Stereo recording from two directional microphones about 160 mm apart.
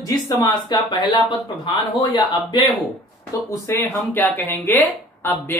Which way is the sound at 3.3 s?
20° left (ahead or behind).